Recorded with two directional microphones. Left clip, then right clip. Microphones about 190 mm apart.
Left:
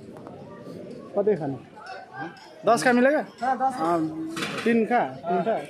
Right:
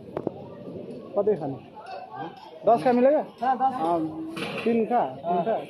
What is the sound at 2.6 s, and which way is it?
Speech, 40° left (ahead or behind).